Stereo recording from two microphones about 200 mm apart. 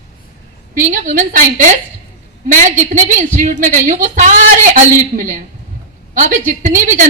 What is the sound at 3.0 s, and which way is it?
A woman's voice, 40° right (ahead or behind).